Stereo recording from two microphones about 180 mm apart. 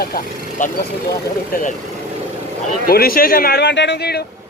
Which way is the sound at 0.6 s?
45° left (ahead or behind).